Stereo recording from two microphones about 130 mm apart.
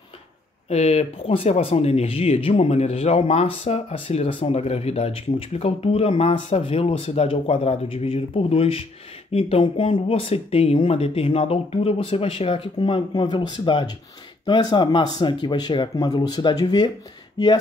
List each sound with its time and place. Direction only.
0.7 s speech: 55° left (ahead or behind); by 16.9 s 30° left (ahead or behind)